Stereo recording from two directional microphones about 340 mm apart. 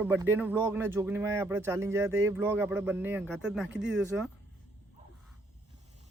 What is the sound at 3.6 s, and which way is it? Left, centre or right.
Speech, right.